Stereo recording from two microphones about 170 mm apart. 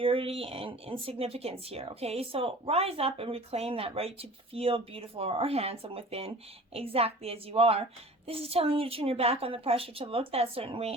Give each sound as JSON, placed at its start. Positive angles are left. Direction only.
{"t": 0.0, "sound": "speech", "side_deg": -30}